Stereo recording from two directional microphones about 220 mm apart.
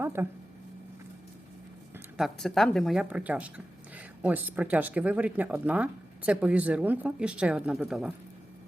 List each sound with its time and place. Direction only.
0.0 s speech: 10° right (ahead or behind)
2.1 s speech: centre (ahead or behind)